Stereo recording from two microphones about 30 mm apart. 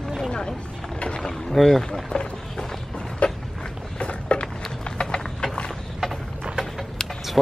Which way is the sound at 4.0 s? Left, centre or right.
Left.